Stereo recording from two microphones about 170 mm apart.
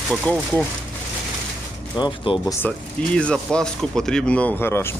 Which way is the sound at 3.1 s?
5° left (ahead or behind).